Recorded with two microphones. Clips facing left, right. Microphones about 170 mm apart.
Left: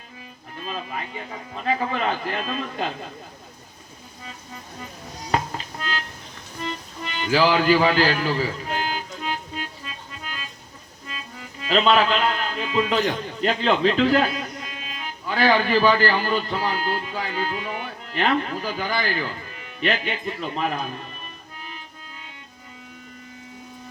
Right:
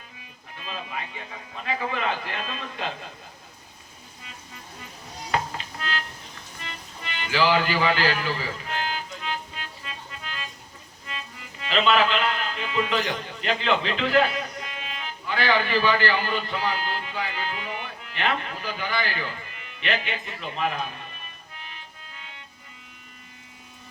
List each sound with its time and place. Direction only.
0.5 s music: 40° left (ahead or behind)
1.6 s a man's voice: 40° left (ahead or behind)
6.6 s music: 40° left (ahead or behind)
11.3 s a man's voice: 40° left (ahead or behind)